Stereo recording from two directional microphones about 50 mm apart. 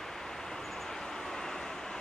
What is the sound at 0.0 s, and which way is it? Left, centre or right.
Vehicle, centre.